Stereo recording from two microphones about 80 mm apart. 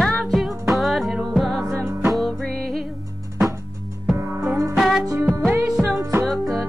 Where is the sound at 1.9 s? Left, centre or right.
Right.